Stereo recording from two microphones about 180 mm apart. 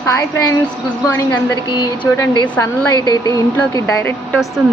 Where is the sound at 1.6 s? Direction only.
25° left (ahead or behind).